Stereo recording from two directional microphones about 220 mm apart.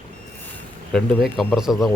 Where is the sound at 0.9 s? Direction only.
Centre (ahead or behind).